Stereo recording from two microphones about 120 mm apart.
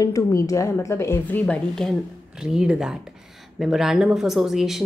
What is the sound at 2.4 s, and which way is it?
A woman's voice, 5° right (ahead or behind).